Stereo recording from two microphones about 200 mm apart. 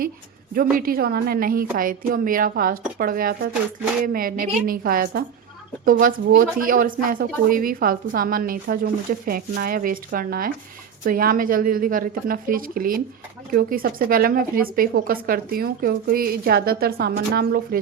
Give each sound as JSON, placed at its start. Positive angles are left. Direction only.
{"t": 0.5, "sound": "speech", "side_deg": -45}